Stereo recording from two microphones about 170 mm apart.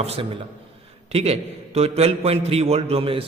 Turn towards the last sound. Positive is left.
turn(degrees=-35)  # may be behind; listen again after turning